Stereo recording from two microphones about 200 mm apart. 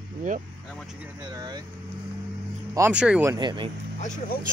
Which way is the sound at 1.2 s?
20° right (ahead or behind).